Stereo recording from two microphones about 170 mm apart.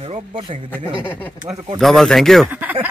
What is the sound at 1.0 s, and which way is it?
Speech, 10° left (ahead or behind).